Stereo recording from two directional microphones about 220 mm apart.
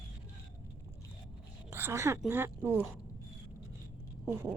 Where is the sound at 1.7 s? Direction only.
10° right (ahead or behind).